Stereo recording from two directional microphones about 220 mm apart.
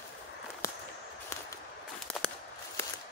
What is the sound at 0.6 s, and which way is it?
Walk, 15° left (ahead or behind).